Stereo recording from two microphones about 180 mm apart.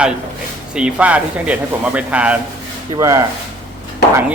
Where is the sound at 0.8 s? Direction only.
5° right (ahead or behind).